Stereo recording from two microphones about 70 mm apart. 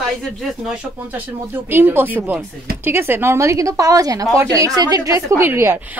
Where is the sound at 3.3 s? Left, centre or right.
Right.